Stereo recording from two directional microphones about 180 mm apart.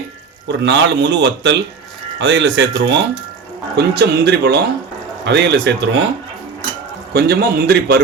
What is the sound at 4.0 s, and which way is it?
Speech, 70° right (ahead or behind).